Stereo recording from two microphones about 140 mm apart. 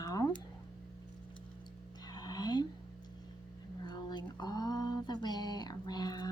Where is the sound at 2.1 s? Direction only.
30° left (ahead or behind).